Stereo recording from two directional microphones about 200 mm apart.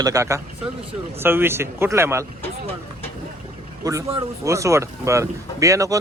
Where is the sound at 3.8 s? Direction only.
15° right (ahead or behind).